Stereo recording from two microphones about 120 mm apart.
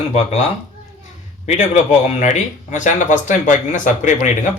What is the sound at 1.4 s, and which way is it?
Speech, 75° left (ahead or behind).